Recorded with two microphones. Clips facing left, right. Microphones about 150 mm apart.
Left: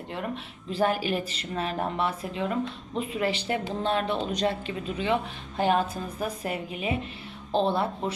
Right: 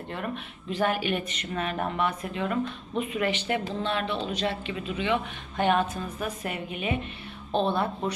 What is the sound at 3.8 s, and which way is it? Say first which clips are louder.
Speech: left 2 dB; 45° left (ahead or behind).